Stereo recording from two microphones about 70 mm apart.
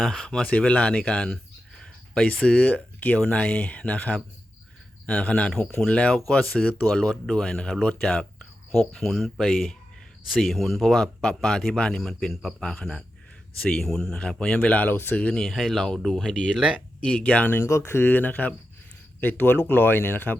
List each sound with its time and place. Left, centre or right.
0.0 s speech: centre
0.3 s speech: centre
12.6 s speech: centre; by 15.3 s left
15.3 s speech: centre
16.6 s speech: centre
17.0 s speech: centre
17.6 s speech: left